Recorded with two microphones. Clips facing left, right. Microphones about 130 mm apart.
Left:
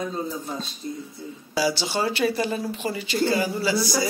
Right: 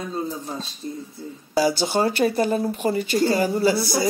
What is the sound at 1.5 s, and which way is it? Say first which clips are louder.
Speech: right 4 dB; 50° right (ahead or behind).